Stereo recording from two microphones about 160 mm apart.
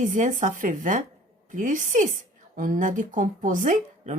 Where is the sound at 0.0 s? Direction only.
55° right (ahead or behind).